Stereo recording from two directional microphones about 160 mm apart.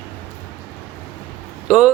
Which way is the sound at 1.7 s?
5° right (ahead or behind).